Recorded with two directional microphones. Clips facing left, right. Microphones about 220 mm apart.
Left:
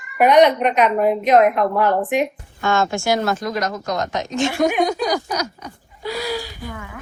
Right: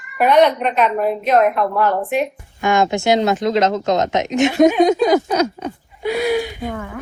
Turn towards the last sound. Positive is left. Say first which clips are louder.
# right 7 dB
turn(degrees=-20)  # may be behind; listen again after turning